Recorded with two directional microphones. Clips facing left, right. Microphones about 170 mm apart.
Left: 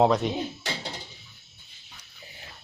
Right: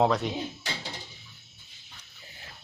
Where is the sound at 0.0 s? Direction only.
20° left (ahead or behind).